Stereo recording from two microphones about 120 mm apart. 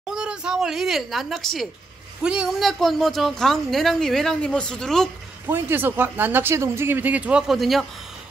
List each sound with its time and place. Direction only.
0.1 s a woman's voice: 5° right (ahead or behind)
5.5 s speech: 15° right (ahead or behind); by 7.8 s centre (ahead or behind)